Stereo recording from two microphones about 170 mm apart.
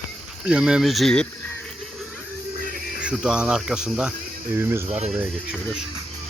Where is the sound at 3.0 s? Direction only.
5° right (ahead or behind).